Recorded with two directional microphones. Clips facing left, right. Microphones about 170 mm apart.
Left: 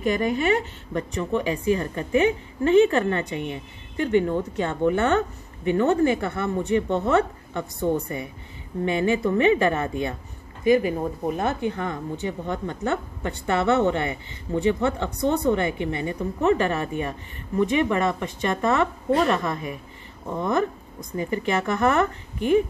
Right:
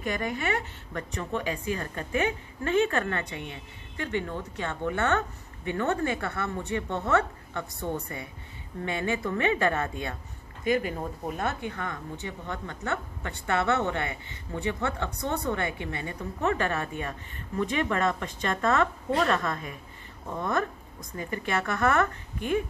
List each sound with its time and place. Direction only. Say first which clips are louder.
0.0 s a woman's voice: left 8 dB; 20° left (ahead or behind)
4.2 s a woman's voice: left 9 dB; 35° left (ahead or behind)
4.8 s a woman's voice: left 6 dB; 25° left (ahead or behind)
8.8 s a woman's voice: left 7 dB; 20° left (ahead or behind)